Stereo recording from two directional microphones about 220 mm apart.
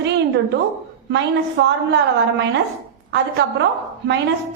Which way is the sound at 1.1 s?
55° right (ahead or behind).